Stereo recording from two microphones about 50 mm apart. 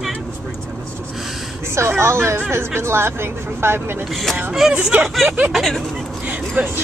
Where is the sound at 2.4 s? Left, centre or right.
Right.